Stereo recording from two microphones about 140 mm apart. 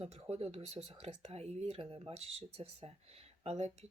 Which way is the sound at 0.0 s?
50° right (ahead or behind).